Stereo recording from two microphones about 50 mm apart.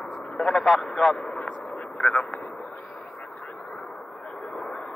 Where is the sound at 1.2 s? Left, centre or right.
Centre.